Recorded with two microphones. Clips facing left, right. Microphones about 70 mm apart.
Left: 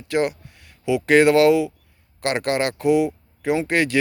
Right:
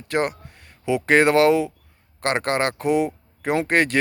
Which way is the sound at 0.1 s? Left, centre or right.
Right.